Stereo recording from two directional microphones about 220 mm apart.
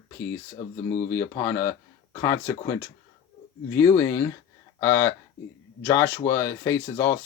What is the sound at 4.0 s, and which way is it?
Speech, 10° left (ahead or behind).